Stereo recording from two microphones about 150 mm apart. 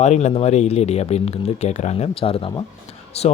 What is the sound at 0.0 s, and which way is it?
Speech, 50° left (ahead or behind).